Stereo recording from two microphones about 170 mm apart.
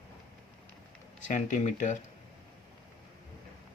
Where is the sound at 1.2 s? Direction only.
45° left (ahead or behind).